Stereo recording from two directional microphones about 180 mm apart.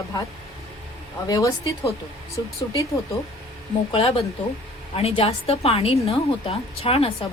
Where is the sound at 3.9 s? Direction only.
30° left (ahead or behind).